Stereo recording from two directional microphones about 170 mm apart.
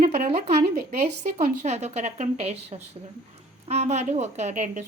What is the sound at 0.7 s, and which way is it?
A woman's voice, 65° right (ahead or behind).